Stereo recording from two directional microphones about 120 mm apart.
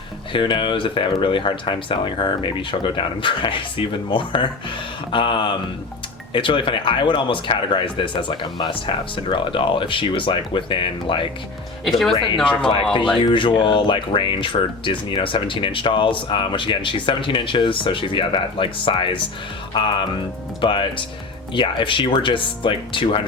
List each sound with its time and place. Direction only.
0.3 s speech: 45° left (ahead or behind)
11.9 s speech: centre (ahead or behind)
12.1 s speech: 40° left (ahead or behind)
20.6 s speech: 45° left (ahead or behind)